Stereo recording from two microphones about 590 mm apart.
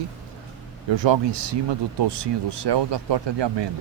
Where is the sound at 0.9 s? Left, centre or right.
Right.